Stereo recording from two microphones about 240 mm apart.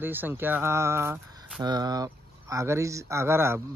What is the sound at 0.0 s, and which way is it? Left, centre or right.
Speech, centre.